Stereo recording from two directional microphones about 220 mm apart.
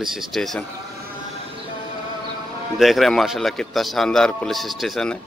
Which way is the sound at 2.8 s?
Centre (ahead or behind).